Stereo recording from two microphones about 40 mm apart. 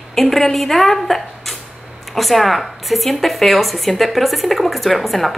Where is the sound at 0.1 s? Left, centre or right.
Centre.